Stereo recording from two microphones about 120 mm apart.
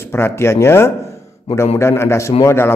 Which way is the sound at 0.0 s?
20° left (ahead or behind).